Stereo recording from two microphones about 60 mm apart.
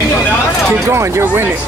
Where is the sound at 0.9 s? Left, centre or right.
Right.